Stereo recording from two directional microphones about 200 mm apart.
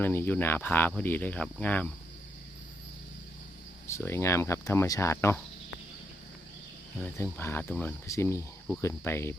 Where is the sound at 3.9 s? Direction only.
15° left (ahead or behind).